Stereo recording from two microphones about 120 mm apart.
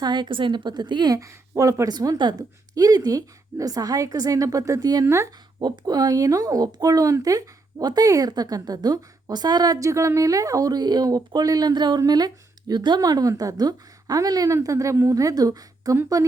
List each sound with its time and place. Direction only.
0.0 s a woman's voice: 40° right (ahead or behind); by 5.3 s 25° right (ahead or behind)
5.5 s speech: 40° right (ahead or behind)